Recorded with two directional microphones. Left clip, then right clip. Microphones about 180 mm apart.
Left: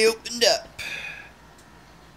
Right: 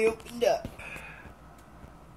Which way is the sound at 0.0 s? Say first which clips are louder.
Left 6 dB; 30° left (ahead or behind).